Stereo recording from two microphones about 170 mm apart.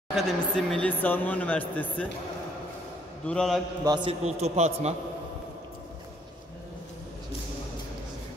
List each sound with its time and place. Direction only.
0.1 s speech: centre (ahead or behind)
3.3 s a man's voice: centre (ahead or behind)
3.8 s a man's voice: 25° right (ahead or behind)